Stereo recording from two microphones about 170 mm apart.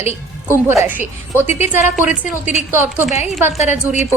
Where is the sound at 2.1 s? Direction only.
45° left (ahead or behind).